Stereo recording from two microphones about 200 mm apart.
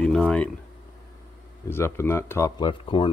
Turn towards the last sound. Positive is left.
turn(degrees=25)  # may be behind; listen again after turning